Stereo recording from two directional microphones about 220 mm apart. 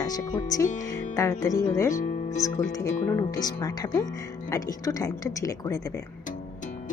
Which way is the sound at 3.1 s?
15° left (ahead or behind).